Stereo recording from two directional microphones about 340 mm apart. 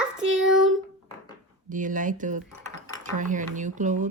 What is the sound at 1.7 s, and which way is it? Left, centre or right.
Speech, right.